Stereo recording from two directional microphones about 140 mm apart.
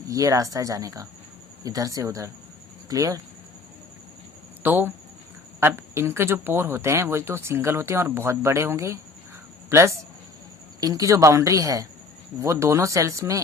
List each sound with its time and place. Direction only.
0.1 s speech: 25° right (ahead or behind)
4.6 s speech: 15° right (ahead or behind)